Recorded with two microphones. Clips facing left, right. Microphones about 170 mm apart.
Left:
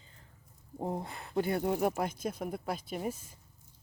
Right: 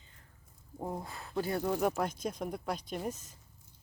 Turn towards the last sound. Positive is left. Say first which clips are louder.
# left 1 dB
turn(degrees=10)  # may be behind; listen again after turning